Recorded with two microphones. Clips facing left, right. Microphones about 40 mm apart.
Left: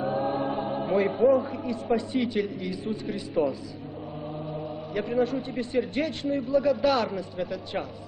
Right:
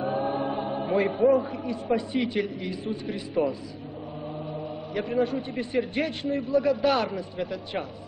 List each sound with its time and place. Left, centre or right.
0.0 s choir: centre
0.9 s a man's voice: centre